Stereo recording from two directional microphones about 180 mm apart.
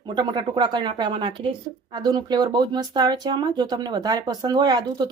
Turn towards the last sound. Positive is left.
turn(degrees=-25)  # may be behind; listen again after turning